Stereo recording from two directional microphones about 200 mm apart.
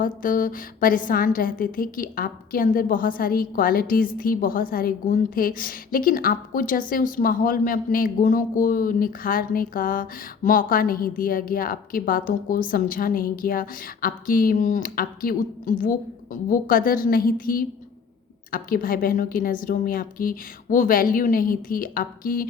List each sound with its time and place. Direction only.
0.0 s a woman's voice: 45° left (ahead or behind)